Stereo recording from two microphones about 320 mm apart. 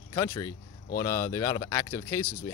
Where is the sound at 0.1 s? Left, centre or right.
Centre.